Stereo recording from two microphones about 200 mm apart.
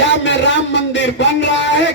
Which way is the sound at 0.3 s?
65° left (ahead or behind).